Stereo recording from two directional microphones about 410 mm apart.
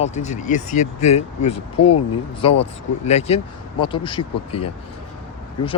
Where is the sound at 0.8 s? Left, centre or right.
Left.